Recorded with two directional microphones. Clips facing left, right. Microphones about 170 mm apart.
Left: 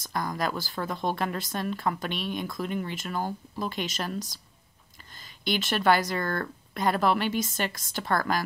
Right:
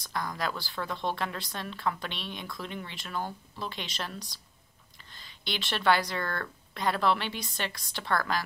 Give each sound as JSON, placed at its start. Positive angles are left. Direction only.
{"t": 0.0, "sound": "speech", "side_deg": 45}